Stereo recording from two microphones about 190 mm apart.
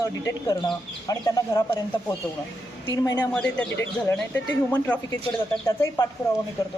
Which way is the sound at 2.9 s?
20° left (ahead or behind).